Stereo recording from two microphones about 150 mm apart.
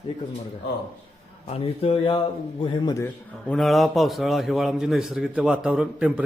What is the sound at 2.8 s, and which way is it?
Speech, 25° left (ahead or behind).